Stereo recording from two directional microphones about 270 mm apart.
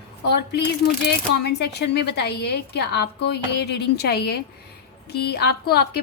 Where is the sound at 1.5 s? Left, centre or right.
Left.